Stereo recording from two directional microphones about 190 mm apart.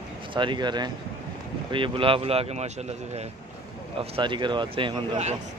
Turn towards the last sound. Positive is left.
turn(degrees=-30)  # may be behind; listen again after turning